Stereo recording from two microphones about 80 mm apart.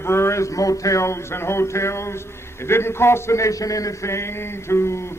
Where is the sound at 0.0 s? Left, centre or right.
Left.